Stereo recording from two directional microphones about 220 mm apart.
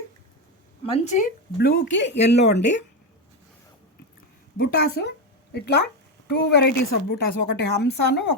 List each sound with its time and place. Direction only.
0.9 s a woman's voice: 35° left (ahead or behind)
1.5 s speech: 50° left (ahead or behind)
4.5 s speech: 45° left (ahead or behind)